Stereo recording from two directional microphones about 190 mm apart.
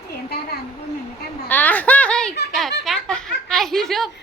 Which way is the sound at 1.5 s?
10° left (ahead or behind).